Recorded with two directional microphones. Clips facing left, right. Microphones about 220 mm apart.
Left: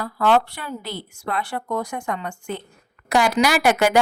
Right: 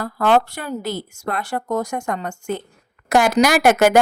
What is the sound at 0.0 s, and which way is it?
A woman's voice, 45° right (ahead or behind).